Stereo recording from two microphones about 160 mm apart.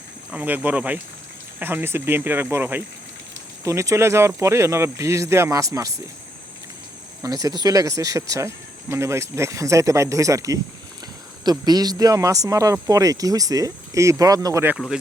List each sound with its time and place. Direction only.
0.3 s speech: 10° right (ahead or behind)
7.2 s speech: 20° right (ahead or behind)